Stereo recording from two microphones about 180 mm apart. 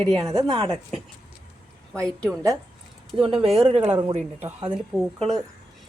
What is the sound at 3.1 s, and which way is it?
Speech, 30° right (ahead or behind).